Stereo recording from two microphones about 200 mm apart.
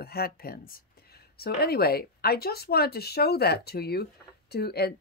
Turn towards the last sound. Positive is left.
turn(degrees=50)  # may be behind; listen again after turning